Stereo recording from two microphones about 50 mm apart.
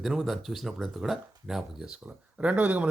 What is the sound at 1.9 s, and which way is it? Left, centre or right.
Speech, right.